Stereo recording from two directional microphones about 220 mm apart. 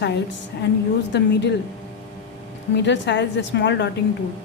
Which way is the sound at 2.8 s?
50° left (ahead or behind).